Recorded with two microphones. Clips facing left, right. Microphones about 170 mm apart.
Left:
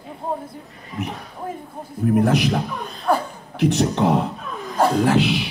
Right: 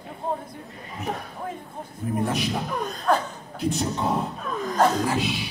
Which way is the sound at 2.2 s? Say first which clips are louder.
Left 7 dB; 75° left (ahead or behind).